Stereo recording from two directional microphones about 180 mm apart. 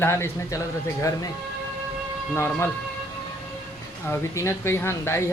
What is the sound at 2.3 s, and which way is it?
Speech, 15° left (ahead or behind).